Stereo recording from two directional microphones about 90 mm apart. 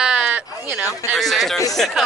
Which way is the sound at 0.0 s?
10° right (ahead or behind).